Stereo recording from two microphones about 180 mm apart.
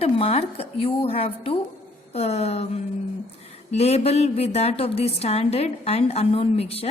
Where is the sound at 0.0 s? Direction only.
35° left (ahead or behind).